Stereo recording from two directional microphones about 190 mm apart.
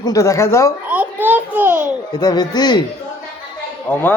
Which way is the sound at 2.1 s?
20° left (ahead or behind).